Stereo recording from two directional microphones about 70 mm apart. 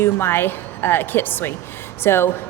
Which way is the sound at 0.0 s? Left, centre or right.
Left.